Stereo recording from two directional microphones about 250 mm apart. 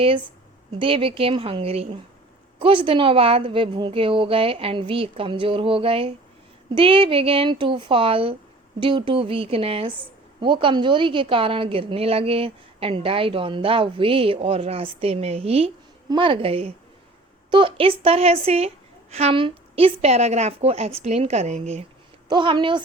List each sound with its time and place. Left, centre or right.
0.8 s a woman's voice: right